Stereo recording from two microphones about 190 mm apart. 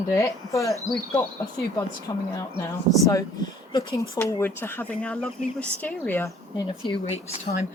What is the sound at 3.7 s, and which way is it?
Speech, 20° left (ahead or behind).